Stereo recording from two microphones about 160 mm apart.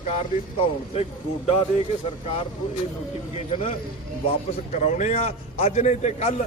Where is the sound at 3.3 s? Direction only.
35° left (ahead or behind).